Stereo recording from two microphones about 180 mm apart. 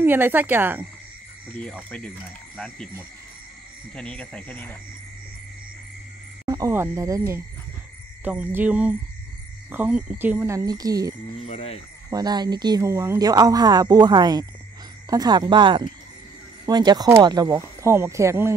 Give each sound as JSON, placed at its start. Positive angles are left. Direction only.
{"t": 0.0, "sound": "speech", "side_deg": -10}
{"t": 3.9, "sound": "speech", "side_deg": 5}
{"t": 6.4, "sound": "speech", "side_deg": -20}
{"t": 11.4, "sound": "sheep", "side_deg": 35}
{"t": 12.1, "sound": "speech", "side_deg": -20}